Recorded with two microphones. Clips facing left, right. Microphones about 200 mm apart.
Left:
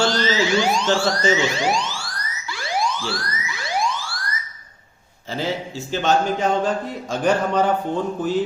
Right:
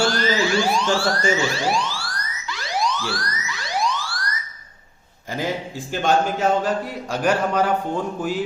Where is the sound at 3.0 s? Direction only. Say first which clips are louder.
Even; 25° left (ahead or behind).